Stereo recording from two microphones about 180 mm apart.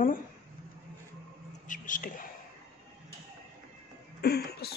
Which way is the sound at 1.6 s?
45° left (ahead or behind).